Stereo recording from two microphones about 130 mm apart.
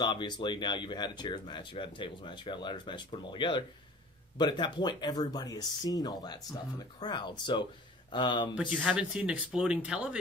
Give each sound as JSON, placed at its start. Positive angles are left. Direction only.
{"t": 0.0, "sound": "speech", "side_deg": 35}
{"t": 8.5, "sound": "speech", "side_deg": -10}